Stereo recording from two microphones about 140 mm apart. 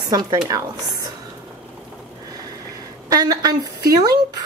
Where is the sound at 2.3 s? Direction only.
25° right (ahead or behind).